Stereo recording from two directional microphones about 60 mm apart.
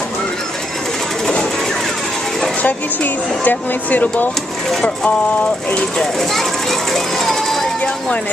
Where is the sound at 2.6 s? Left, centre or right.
Left.